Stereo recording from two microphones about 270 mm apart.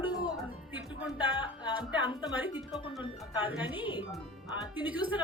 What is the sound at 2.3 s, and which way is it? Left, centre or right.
A woman's voice, centre.